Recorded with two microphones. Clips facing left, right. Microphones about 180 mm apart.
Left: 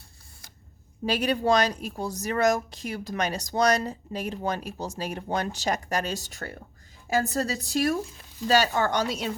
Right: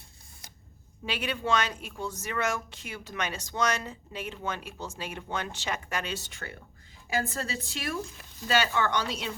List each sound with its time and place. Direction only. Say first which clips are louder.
1.0 s speech: left 8 dB; 40° left (ahead or behind)